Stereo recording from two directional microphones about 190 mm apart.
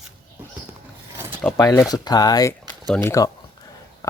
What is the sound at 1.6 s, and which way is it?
Speech, 15° left (ahead or behind).